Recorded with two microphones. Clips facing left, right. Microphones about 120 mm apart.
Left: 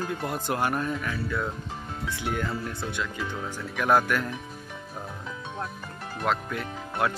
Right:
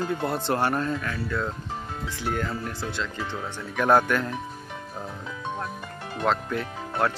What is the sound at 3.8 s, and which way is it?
Speech, 5° left (ahead or behind).